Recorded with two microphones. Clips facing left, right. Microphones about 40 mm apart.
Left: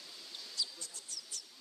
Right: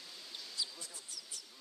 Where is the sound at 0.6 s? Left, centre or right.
Centre.